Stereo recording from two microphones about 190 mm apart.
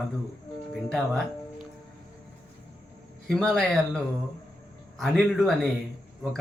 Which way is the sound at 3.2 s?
Centre (ahead or behind).